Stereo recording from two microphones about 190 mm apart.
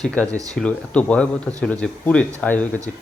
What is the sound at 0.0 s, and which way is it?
Speech, 5° left (ahead or behind).